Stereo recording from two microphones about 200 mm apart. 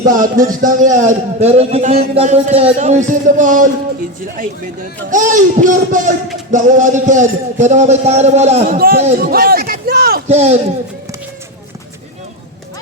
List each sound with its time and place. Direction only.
0.0 s a man's voice: 40° right (ahead or behind)
9.3 s a sound: 50° right (ahead or behind)
10.2 s a man's voice: 35° right (ahead or behind)